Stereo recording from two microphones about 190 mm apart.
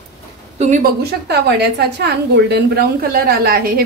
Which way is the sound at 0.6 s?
40° right (ahead or behind).